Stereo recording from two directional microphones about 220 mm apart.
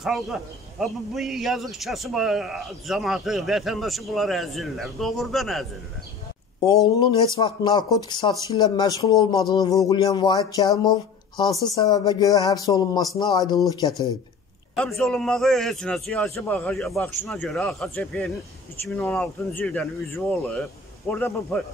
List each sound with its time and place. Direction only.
0.0 s a man's voice: centre (ahead or behind)
7.3 s speech: 20° left (ahead or behind)
14.8 s a man's voice: centre (ahead or behind)